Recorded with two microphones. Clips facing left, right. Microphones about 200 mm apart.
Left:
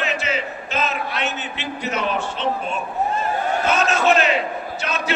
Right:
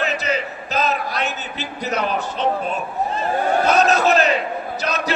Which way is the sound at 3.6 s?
40° right (ahead or behind).